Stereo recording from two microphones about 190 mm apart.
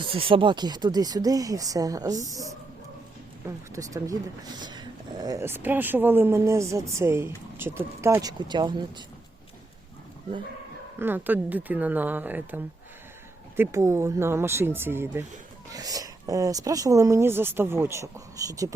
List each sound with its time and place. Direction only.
0.1 s speech: 30° right (ahead or behind)
3.7 s speech: 15° right (ahead or behind)
11.0 s speech: 10° right (ahead or behind)